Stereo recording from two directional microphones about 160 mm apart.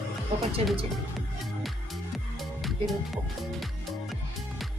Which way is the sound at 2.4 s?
Centre (ahead or behind).